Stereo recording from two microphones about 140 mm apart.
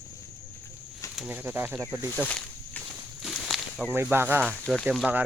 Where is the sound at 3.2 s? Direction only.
Centre (ahead or behind).